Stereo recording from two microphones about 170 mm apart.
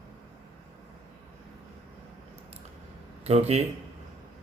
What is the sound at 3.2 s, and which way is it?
Speech, 40° right (ahead or behind).